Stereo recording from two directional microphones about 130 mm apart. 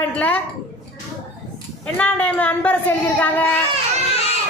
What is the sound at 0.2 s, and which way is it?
Speech, 10° left (ahead or behind).